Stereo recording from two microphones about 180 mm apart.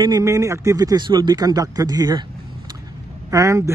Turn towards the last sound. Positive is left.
turn(degrees=-15)  # may be behind; listen again after turning